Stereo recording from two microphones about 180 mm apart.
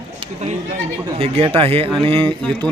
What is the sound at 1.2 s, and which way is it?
A man's voice, 30° right (ahead or behind).